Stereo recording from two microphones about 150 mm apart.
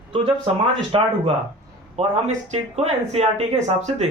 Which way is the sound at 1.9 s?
50° right (ahead or behind).